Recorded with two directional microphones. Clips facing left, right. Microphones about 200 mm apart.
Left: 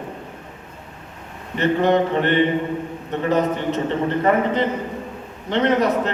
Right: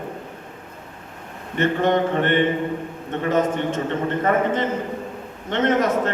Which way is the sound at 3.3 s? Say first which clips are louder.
Left 1 dB; 50° right (ahead or behind).